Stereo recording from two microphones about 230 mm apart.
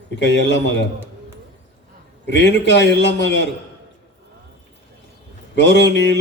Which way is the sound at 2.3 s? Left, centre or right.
Left.